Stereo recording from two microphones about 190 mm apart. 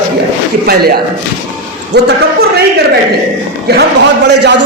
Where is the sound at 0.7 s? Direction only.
55° right (ahead or behind).